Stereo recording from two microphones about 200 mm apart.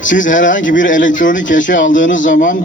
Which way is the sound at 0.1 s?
40° left (ahead or behind).